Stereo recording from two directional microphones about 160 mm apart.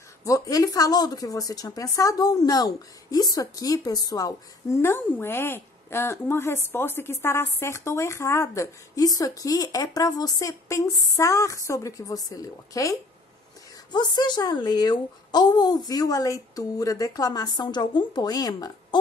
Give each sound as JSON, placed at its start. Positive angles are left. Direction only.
{"t": 0.2, "sound": "a woman's voice", "side_deg": 20}
{"t": 13.9, "sound": "a woman's voice", "side_deg": 30}